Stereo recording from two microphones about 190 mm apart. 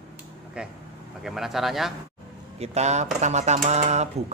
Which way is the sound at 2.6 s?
35° right (ahead or behind).